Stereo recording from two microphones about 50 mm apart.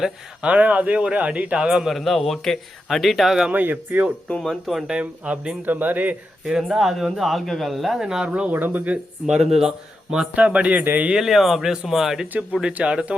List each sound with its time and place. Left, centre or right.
0.4 s a man's voice: right
1.5 s speech: centre
1.9 s speech: centre
3.5 s speech: right
4.4 s speech: centre
4.9 s a man's voice: right
5.6 s speech: right
6.4 s speech: centre
8.3 s a man's voice: right
8.5 s speech: right
9.4 s speech: centre
10.3 s a man's voice: right
11.1 s speech: centre
12.7 s a man's voice: right